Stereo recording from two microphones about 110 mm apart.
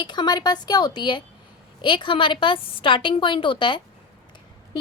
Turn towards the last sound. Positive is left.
turn(degrees=50)  # may be behind; listen again after turning